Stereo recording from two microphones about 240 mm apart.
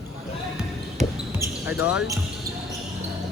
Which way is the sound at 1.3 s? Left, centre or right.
Centre.